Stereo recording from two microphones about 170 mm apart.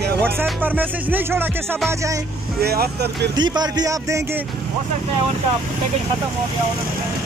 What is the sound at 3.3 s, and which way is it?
Speech, 25° right (ahead or behind).